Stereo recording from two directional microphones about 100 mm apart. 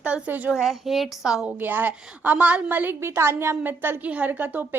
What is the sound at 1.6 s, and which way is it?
A woman's voice, 20° right (ahead or behind).